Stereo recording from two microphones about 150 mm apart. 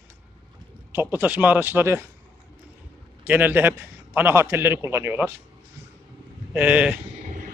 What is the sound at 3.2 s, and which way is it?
Speech, 10° right (ahead or behind).